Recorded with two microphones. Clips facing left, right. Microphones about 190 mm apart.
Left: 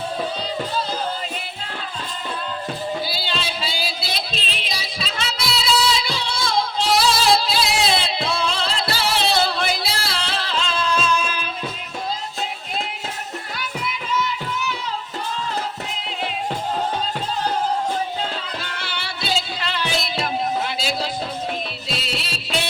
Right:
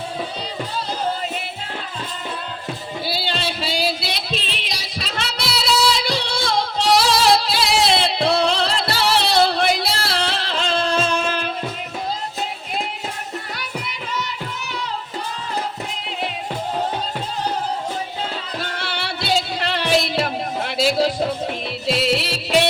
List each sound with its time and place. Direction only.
3.1 s music: 65° right (ahead or behind)
18.6 s music: 65° right (ahead or behind)